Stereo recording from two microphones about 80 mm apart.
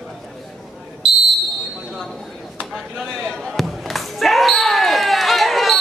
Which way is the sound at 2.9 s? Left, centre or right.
Centre.